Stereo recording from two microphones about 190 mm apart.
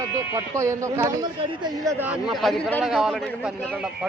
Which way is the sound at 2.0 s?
5° right (ahead or behind).